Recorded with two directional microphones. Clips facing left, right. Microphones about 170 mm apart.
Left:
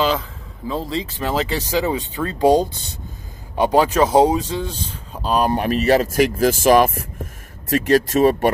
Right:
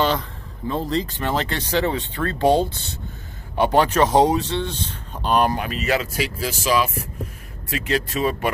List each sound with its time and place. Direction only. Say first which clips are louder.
0.0 s speech: left 1 dB; centre (ahead or behind)
5.7 s speech: left 7 dB; 40° left (ahead or behind)